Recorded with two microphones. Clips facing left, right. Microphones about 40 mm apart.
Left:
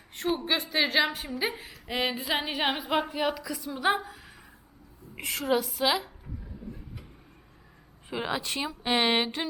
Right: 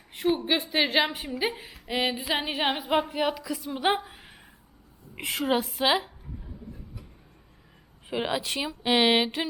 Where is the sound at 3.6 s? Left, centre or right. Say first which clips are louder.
Right 1 dB; right.